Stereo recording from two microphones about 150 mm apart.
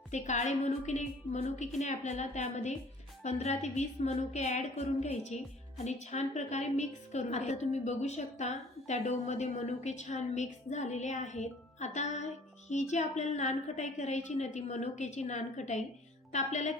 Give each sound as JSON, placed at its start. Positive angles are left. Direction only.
{"t": 0.1, "sound": "a woman's voice", "side_deg": 50}